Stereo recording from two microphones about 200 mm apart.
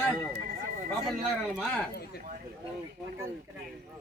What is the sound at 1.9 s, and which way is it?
Speech, 50° left (ahead or behind).